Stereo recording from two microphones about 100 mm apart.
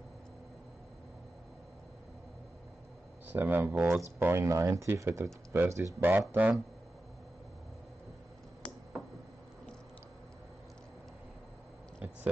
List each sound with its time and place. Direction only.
3.3 s speech: 20° right (ahead or behind)